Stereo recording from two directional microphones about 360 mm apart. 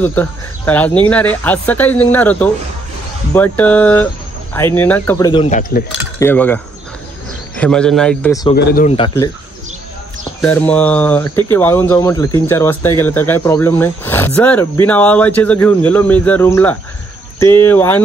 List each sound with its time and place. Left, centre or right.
0.0 s speech: centre; by 5.9 s left
6.1 s speech: centre
8.5 s speech: left
10.4 s speech: centre